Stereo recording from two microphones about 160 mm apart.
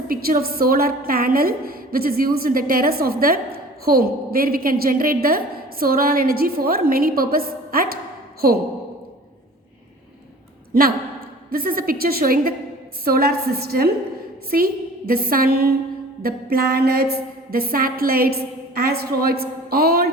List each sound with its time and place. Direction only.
0.1 s a woman's voice: 65° right (ahead or behind)
11.5 s a woman's voice: 65° right (ahead or behind)